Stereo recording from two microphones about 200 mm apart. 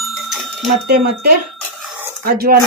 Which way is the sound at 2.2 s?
45° right (ahead or behind).